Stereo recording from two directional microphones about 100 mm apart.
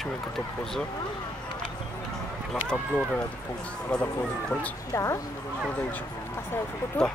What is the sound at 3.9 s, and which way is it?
Speech, 10° left (ahead or behind).